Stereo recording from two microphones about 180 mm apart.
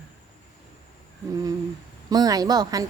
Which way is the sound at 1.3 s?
20° right (ahead or behind).